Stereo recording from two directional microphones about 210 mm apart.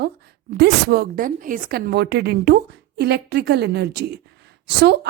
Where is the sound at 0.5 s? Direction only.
50° right (ahead or behind).